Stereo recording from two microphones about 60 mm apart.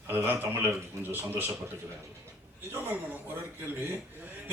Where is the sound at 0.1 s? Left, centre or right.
Right.